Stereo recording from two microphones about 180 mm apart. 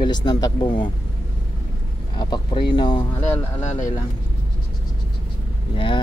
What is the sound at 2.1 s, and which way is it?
Speech, 25° left (ahead or behind).